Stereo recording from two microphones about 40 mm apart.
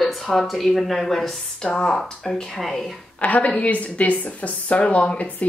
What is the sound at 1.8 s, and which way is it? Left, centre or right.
Speech, left.